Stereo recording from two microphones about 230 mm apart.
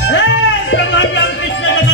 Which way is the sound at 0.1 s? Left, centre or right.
Left.